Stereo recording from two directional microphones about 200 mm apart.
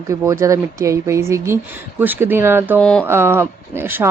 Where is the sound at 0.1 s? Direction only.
15° right (ahead or behind).